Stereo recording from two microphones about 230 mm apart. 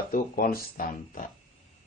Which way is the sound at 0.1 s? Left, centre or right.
Left.